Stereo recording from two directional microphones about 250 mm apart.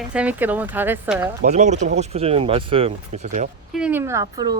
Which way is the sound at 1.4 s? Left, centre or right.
Right.